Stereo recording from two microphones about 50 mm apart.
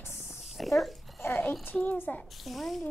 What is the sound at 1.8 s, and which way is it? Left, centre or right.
Speech, left.